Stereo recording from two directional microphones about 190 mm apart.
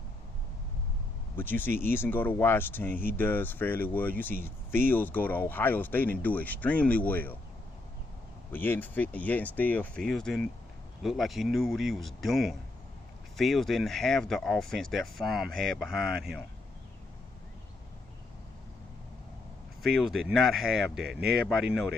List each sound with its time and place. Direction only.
1.4 s speech: 10° left (ahead or behind)
8.5 s speech: 10° left (ahead or behind)
16.1 s speech: 55° right (ahead or behind)
19.8 s speech: centre (ahead or behind)